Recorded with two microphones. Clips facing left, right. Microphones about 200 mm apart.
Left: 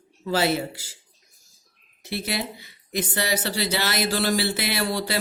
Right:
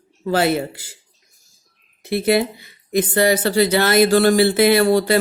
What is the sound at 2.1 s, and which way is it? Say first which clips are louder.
Speech: right 12 dB; 55° right (ahead or behind).